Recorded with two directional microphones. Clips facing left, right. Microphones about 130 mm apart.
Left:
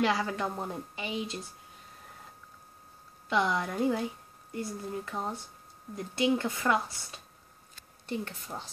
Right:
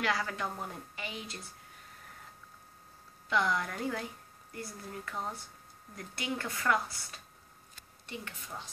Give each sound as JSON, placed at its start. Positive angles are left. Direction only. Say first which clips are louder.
{"t": 0.0, "sound": "speech", "louder": "left 5 dB", "side_deg": 20}
{"t": 3.3, "sound": "speech", "louder": "left 3 dB", "side_deg": 20}
{"t": 8.1, "sound": "speech", "louder": "left 7 dB", "side_deg": 35}